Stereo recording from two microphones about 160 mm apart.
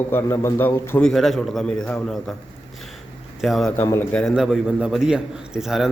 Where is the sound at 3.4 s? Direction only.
Centre (ahead or behind).